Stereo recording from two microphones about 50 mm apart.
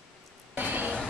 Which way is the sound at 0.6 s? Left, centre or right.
Right.